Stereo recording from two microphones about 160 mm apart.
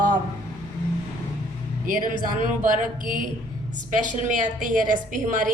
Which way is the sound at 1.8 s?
60° right (ahead or behind).